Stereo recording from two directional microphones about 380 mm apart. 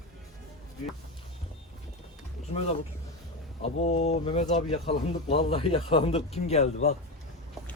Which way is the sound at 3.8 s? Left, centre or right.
Centre.